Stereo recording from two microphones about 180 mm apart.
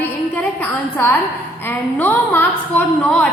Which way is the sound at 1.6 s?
10° left (ahead or behind).